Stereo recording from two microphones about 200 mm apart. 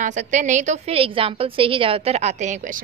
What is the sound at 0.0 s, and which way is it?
A woman's voice, 35° right (ahead or behind).